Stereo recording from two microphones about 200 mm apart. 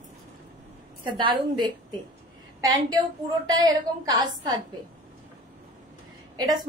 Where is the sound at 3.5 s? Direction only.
20° right (ahead or behind).